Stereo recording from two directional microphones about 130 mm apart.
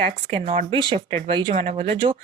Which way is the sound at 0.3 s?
50° right (ahead or behind).